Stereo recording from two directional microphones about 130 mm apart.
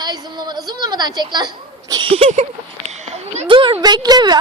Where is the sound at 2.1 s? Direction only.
55° right (ahead or behind).